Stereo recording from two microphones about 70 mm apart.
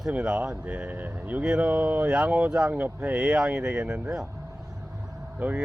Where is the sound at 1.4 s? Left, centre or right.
Centre.